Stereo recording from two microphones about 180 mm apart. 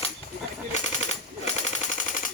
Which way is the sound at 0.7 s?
40° left (ahead or behind).